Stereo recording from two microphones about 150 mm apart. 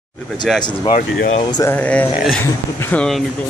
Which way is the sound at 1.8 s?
10° left (ahead or behind).